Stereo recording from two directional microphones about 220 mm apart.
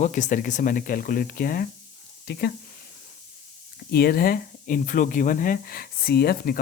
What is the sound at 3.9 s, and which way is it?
Speech, 45° left (ahead or behind).